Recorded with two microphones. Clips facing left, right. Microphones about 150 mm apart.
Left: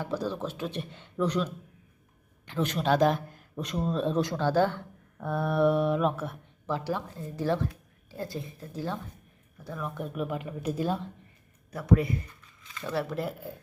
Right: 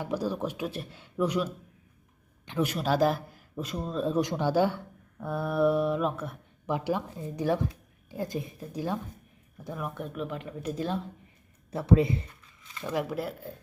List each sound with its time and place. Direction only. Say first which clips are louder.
0.0 s speech: right 1 dB; 10° right (ahead or behind)
2.5 s speech: left 1 dB; 10° right (ahead or behind)
4.2 s speech: right 1 dB; 15° right (ahead or behind); by 6.3 s centre (ahead or behind)
6.7 s speech: right 2 dB; 15° right (ahead or behind)
9.9 s speech: left 2 dB; 5° left (ahead or behind)
11.7 s speech: right 2 dB; 25° right (ahead or behind)
12.8 s speech: right 1 dB; 10° right (ahead or behind)